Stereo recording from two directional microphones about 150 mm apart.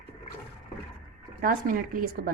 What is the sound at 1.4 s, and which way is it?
Speech, 70° right (ahead or behind).